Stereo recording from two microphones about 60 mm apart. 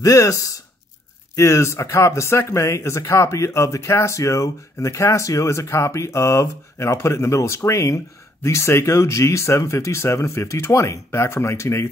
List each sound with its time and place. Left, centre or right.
0.0 s speech: left
1.3 s speech: left